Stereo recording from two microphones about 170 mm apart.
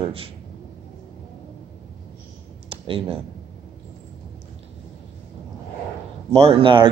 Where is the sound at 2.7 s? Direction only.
35° right (ahead or behind).